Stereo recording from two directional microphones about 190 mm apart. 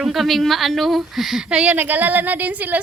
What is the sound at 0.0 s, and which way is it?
A woman's voice, centre (ahead or behind).